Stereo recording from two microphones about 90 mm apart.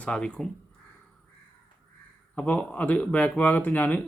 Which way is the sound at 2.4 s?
15° left (ahead or behind).